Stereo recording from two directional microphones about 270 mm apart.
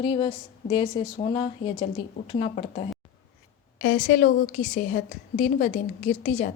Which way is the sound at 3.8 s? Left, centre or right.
Left.